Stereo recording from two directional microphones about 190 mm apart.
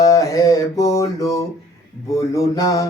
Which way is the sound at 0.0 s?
15° left (ahead or behind).